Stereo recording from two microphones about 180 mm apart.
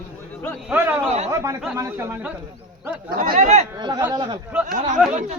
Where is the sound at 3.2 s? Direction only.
45° right (ahead or behind).